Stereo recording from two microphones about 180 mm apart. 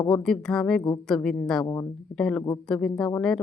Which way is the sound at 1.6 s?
20° left (ahead or behind).